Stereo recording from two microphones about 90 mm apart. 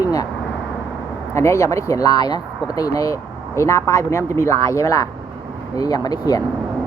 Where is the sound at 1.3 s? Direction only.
35° left (ahead or behind).